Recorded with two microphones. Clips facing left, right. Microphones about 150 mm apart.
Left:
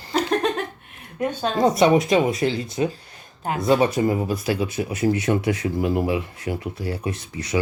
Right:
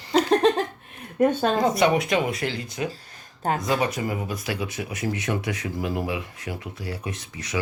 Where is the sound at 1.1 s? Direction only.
50° right (ahead or behind).